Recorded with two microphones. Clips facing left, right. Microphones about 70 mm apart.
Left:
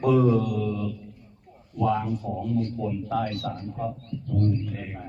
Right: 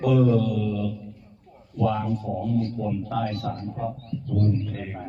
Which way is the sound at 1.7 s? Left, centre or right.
Centre.